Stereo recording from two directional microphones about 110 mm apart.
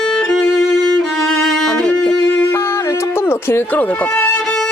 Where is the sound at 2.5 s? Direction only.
25° left (ahead or behind).